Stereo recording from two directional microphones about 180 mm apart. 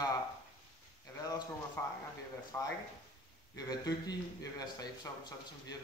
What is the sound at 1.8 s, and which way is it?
A man's voice, 10° left (ahead or behind).